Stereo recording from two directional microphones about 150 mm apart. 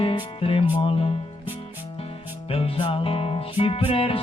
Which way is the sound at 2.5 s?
40° left (ahead or behind).